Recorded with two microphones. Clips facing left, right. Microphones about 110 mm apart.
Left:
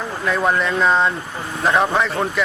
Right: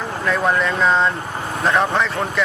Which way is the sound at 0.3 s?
Centre (ahead or behind).